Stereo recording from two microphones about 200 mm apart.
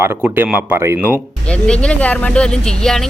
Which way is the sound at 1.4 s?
5° left (ahead or behind).